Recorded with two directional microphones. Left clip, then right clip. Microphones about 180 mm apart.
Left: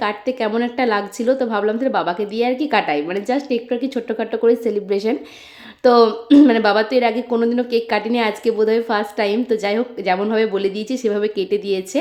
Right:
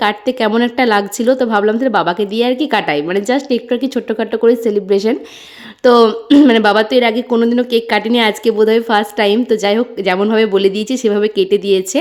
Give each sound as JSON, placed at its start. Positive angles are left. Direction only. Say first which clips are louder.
{"t": 0.0, "sound": "a woman's voice", "louder": "right 6 dB", "side_deg": -30}